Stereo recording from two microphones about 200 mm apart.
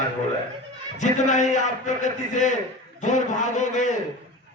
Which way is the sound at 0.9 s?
35° left (ahead or behind).